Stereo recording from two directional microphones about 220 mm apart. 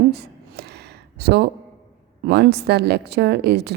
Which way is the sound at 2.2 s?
45° right (ahead or behind).